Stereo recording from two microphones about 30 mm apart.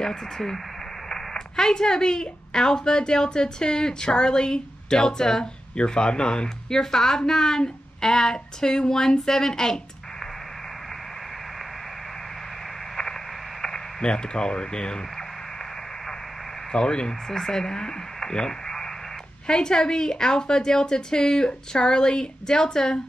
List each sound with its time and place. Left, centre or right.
1.0 s a woman's voice: centre
13.6 s radio: centre
14.0 s a woman's voice: left
16.7 s a woman's voice: left
17.3 s a woman's voice: centre